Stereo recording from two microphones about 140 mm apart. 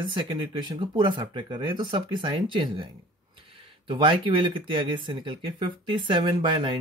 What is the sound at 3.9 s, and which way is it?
Speech, 40° right (ahead or behind).